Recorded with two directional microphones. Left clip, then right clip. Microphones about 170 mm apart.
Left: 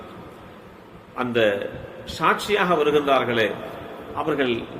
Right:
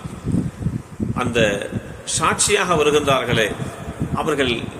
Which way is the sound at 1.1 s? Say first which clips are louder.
Right 2 dB; 5° right (ahead or behind).